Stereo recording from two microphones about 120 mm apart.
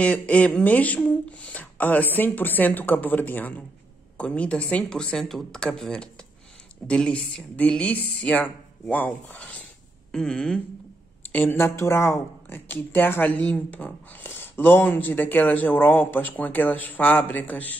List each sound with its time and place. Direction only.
0.0 s speech: 10° left (ahead or behind)
11.3 s speech: 20° left (ahead or behind)